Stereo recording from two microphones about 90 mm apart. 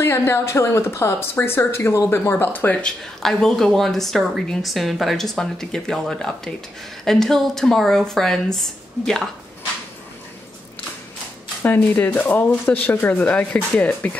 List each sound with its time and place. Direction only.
0.0 s a woman's voice: 25° left (ahead or behind)
3.2 s a woman's voice: 5° left (ahead or behind)
11.6 s a woman's voice: 20° left (ahead or behind)